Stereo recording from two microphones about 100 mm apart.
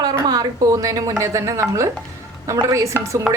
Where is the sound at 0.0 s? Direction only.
40° right (ahead or behind).